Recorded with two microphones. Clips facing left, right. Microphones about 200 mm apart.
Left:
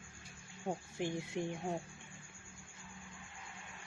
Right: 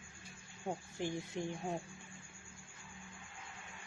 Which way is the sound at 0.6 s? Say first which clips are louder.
Left 1 dB; 10° left (ahead or behind).